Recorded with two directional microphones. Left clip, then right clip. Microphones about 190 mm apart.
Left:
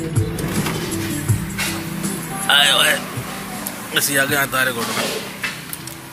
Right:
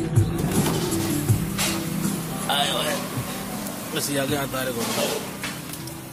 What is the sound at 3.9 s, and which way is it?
Speech, centre (ahead or behind).